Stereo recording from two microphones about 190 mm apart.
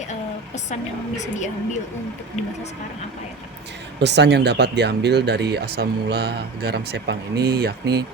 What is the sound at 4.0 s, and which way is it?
Speech, 65° right (ahead or behind).